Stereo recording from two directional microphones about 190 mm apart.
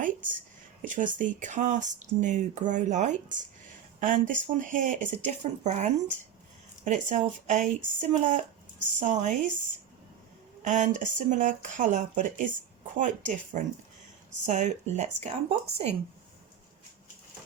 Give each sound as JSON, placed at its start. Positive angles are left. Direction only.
{"t": 0.0, "sound": "a sound", "side_deg": -45}
{"t": 0.8, "sound": "speech", "side_deg": -45}
{"t": 10.6, "sound": "speech", "side_deg": -40}